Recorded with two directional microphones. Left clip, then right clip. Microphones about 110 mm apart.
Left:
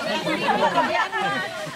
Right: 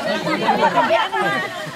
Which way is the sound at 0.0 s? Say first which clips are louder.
Right 4 dB; 5° left (ahead or behind).